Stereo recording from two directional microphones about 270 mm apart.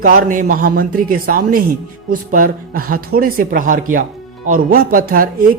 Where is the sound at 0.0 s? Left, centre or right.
Right.